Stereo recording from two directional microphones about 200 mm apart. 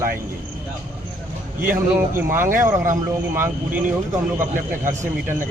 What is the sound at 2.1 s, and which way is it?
Speech, 10° right (ahead or behind).